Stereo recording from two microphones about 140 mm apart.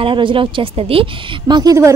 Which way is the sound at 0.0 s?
35° right (ahead or behind).